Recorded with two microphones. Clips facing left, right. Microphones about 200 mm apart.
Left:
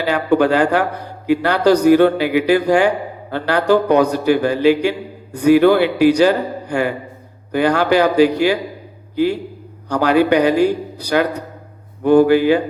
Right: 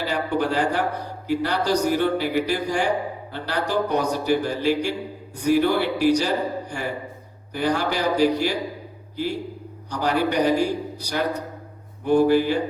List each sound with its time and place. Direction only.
0.0 s a man's voice: 75° left (ahead or behind)
9.9 s a man's voice: 70° left (ahead or behind)